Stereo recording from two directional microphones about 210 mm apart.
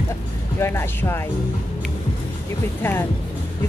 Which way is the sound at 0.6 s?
10° left (ahead or behind).